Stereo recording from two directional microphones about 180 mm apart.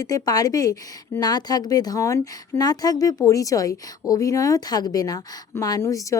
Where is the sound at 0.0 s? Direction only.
20° left (ahead or behind).